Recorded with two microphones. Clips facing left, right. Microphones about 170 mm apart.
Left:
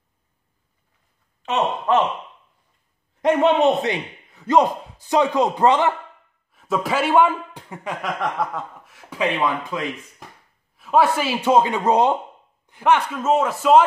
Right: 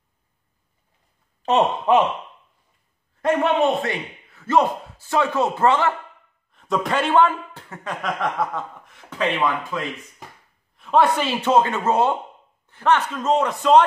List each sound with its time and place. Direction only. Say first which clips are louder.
1.4 s speech: right 5 dB; 35° right (ahead or behind)
1.9 s speech: right 2 dB; 20° right (ahead or behind)
3.2 s speech: left 2 dB; 20° left (ahead or behind)
6.5 s a man's voice: even; 5° left (ahead or behind)
8.2 s a man's voice: even; centre (ahead or behind)